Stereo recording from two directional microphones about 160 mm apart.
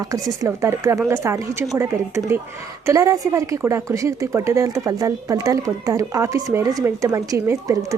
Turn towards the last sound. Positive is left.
turn(degrees=-20)  # may be behind; listen again after turning